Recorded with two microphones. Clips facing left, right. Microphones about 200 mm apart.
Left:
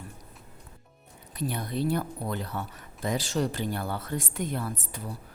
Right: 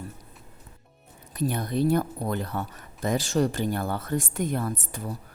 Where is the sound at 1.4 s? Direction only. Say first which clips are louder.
Right 5 dB; 45° right (ahead or behind).